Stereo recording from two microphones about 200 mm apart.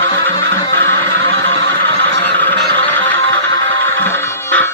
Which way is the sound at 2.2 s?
10° left (ahead or behind).